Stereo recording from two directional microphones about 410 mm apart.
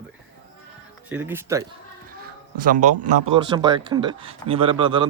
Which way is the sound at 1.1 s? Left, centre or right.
Centre.